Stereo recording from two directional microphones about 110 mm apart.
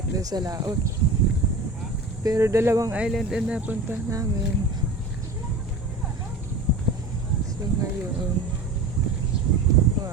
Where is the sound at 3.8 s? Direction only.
30° right (ahead or behind).